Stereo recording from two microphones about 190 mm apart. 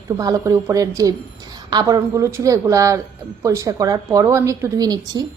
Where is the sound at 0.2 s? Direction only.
20° right (ahead or behind).